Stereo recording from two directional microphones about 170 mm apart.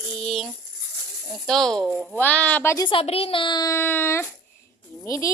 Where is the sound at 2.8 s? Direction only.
35° left (ahead or behind).